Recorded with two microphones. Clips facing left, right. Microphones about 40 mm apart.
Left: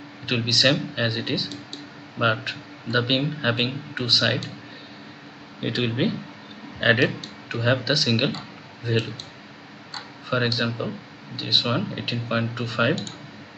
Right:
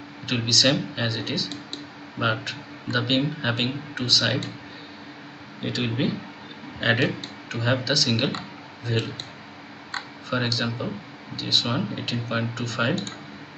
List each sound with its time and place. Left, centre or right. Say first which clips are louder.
0.5 s speech: even; centre
5.6 s speech: left 2 dB; centre
10.3 s speech: left 2 dB; centre